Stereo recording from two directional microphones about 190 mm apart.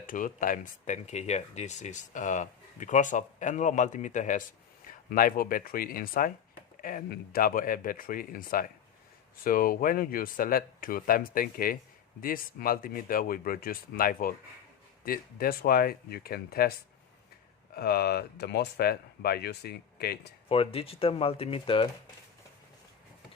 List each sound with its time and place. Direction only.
0.1 s speech: 45° left (ahead or behind)
17.7 s speech: 55° left (ahead or behind)
20.5 s speech: 30° left (ahead or behind)